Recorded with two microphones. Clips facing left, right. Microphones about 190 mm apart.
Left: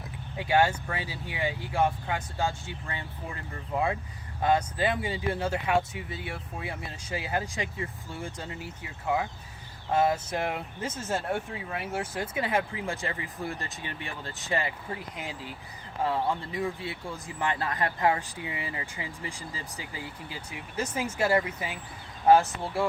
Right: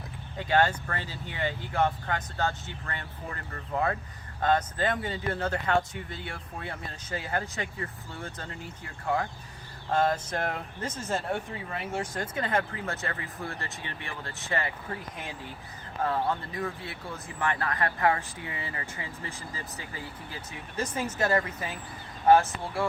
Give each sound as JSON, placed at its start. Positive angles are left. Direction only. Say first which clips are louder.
{"t": 0.3, "sound": "speech", "louder": "left 1 dB", "side_deg": 10}
{"t": 16.0, "sound": "speech", "louder": "even", "side_deg": 15}